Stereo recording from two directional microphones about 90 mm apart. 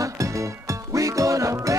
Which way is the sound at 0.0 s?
35° right (ahead or behind).